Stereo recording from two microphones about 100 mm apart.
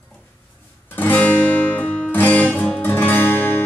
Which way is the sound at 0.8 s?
20° left (ahead or behind).